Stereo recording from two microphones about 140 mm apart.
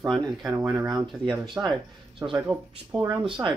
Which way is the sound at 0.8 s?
30° right (ahead or behind).